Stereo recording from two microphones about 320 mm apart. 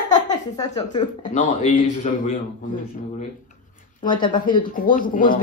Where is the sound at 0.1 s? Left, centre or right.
Centre.